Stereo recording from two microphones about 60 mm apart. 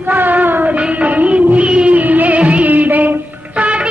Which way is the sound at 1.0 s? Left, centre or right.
Right.